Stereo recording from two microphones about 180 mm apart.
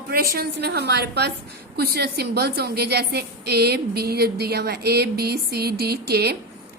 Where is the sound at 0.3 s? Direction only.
65° right (ahead or behind).